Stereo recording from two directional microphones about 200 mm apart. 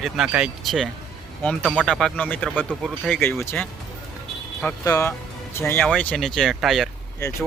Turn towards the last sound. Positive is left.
turn(degrees=15)  # may be behind; listen again after turning